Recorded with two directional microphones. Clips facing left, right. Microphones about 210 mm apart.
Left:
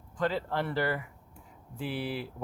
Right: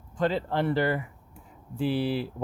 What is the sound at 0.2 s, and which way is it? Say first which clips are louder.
Speech: right 4 dB; 25° right (ahead or behind).